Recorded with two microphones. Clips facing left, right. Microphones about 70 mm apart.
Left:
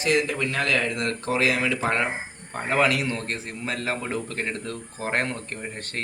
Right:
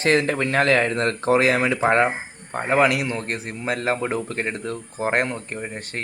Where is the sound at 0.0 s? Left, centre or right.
Right.